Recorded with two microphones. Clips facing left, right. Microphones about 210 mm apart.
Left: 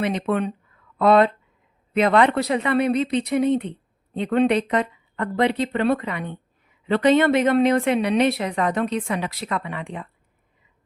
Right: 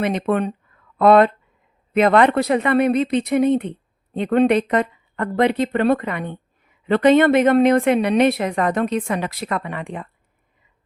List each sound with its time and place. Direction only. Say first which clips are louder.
0.0 s a woman's voice: right 3 dB; 50° right (ahead or behind)